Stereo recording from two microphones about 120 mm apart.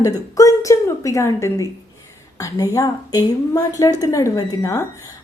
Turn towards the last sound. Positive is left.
turn(degrees=25)  # may be behind; listen again after turning